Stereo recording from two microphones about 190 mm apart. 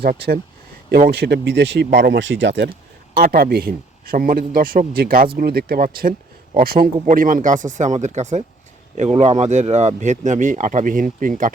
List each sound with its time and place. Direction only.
0.0 s a man's voice: 55° right (ahead or behind); by 2.6 s 70° right (ahead or behind)
3.2 s a man's voice: 50° right (ahead or behind)